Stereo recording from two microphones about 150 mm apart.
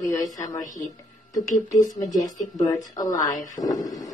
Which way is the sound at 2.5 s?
25° left (ahead or behind).